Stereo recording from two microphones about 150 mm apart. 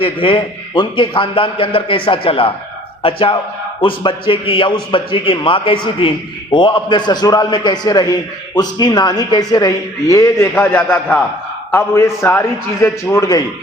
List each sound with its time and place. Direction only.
0.0 s a man's voice: 35° left (ahead or behind)